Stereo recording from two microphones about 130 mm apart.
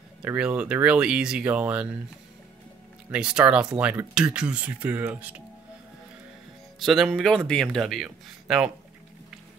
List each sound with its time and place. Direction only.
0.2 s speech: 10° right (ahead or behind)
3.1 s speech: 5° right (ahead or behind)
6.8 s speech: centre (ahead or behind)